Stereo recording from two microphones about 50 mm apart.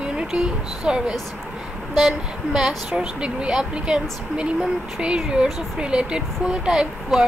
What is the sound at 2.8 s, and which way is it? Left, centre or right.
A woman's voice, right.